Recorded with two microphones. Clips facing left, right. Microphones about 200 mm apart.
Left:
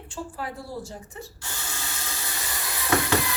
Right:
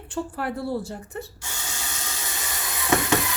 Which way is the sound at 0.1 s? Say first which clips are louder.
Right 6 dB; 65° right (ahead or behind).